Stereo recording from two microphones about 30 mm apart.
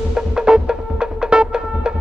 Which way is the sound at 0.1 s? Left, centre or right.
Right.